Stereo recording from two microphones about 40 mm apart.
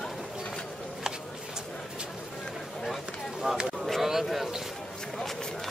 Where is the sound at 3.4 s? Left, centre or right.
Centre.